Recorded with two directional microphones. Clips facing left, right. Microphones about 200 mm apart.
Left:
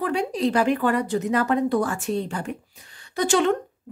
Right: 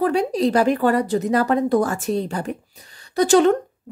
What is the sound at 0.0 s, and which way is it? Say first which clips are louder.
A woman's voice: right 5 dB; 40° right (ahead or behind).